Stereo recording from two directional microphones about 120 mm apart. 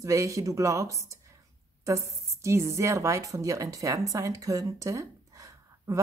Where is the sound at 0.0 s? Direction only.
25° right (ahead or behind).